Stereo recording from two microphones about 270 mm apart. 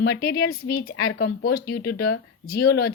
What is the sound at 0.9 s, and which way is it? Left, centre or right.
Speech, left.